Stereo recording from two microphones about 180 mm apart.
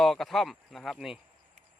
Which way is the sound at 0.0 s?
Centre (ahead or behind).